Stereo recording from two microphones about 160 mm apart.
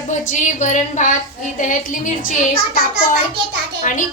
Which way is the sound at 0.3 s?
50° left (ahead or behind).